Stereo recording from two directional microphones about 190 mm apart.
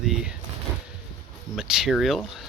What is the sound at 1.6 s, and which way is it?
Speech, 5° right (ahead or behind).